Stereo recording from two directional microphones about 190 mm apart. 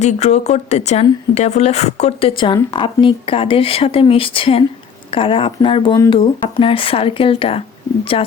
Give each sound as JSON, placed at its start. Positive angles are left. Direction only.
{"t": 0.0, "sound": "speech", "side_deg": 35}